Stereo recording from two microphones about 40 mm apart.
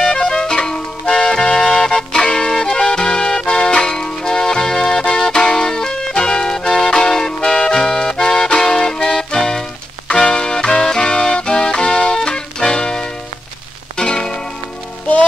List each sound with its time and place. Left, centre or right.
0.0 s music: centre
10.0 s music: left